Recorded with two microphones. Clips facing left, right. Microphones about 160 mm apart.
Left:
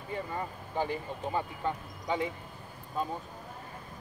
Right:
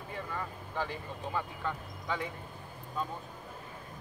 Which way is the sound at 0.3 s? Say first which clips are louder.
Left 3 dB; 25° left (ahead or behind).